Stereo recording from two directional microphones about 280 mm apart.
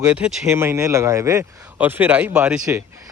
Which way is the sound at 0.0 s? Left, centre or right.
Centre.